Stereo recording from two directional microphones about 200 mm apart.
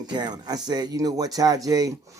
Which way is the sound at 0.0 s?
20° right (ahead or behind).